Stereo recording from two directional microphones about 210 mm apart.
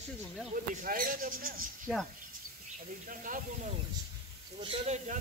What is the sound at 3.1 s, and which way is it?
Speech, 40° right (ahead or behind).